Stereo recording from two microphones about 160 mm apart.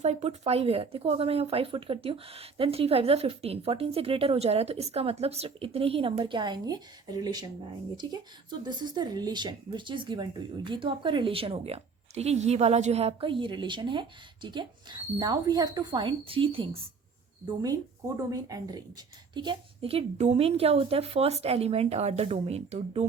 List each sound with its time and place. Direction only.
0.0 s speech: 40° right (ahead or behind)
18.3 s speech: 20° right (ahead or behind); by 23.0 s 40° right (ahead or behind)